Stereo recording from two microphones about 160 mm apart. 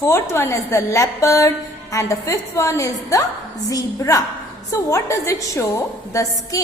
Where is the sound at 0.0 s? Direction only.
15° left (ahead or behind).